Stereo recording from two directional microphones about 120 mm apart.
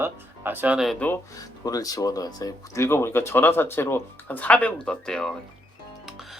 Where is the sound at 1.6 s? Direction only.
30° left (ahead or behind).